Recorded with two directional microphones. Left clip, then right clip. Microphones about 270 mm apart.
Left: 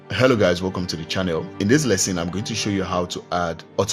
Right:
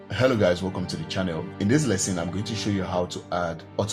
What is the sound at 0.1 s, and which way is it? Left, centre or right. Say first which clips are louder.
Speech: left 4 dB; left.